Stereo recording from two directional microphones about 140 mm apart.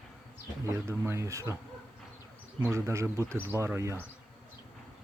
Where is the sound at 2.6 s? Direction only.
20° right (ahead or behind).